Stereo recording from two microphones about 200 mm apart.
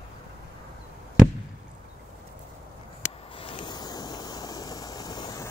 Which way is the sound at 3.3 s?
25° left (ahead or behind).